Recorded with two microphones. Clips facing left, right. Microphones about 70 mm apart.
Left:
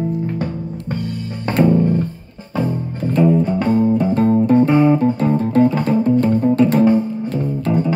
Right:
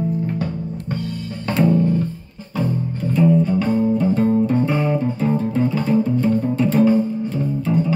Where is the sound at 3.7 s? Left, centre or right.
Left.